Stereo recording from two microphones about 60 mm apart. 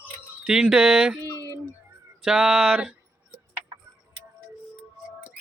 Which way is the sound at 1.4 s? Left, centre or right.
Left.